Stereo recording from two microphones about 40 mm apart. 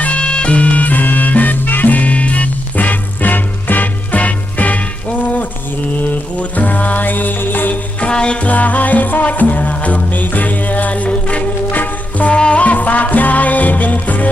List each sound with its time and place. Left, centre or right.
0.0 s music: left
8.0 s music: left
8.4 s music: left
11.7 s music: left